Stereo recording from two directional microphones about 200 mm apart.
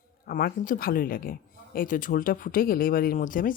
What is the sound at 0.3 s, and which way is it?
A woman's voice, 45° left (ahead or behind).